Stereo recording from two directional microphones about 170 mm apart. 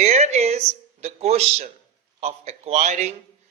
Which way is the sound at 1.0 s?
40° right (ahead or behind).